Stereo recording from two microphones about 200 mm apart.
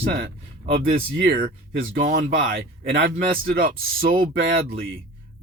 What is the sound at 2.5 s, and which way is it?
Speech, 70° right (ahead or behind).